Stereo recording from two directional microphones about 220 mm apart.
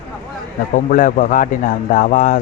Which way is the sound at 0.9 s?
35° left (ahead or behind).